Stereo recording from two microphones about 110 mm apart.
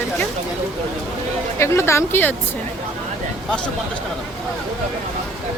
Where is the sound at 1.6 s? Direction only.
25° left (ahead or behind).